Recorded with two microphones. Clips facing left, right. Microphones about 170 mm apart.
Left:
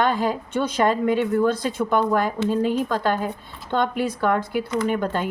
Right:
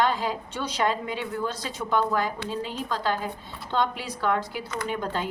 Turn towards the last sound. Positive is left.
turn(degrees=55)  # may be behind; listen again after turning